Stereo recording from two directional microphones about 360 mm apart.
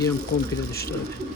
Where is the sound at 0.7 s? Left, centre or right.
Left.